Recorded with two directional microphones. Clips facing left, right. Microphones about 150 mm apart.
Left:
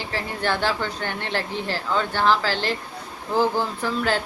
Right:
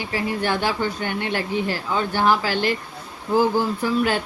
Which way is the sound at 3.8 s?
15° right (ahead or behind).